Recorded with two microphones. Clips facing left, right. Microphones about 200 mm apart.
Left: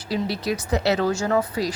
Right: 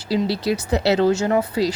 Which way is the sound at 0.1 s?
30° right (ahead or behind).